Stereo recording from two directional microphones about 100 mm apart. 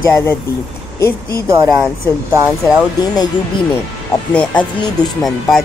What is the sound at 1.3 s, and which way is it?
Speech, 35° right (ahead or behind).